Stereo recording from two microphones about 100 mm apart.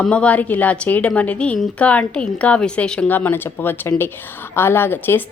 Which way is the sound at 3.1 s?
20° left (ahead or behind).